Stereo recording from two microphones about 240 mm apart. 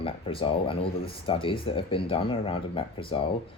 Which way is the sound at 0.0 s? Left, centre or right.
Left.